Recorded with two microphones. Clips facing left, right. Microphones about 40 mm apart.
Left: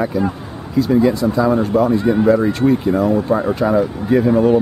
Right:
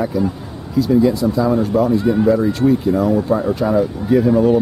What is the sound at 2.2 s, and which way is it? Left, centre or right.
Speech, left.